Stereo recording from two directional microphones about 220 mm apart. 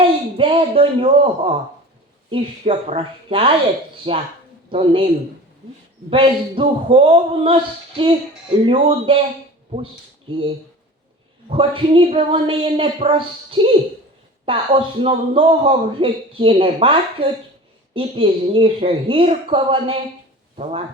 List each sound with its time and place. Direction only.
0.0 s a man's voice: 25° right (ahead or behind)
10.3 s a man's voice: 25° right (ahead or behind)
11.4 s a man's voice: 25° right (ahead or behind)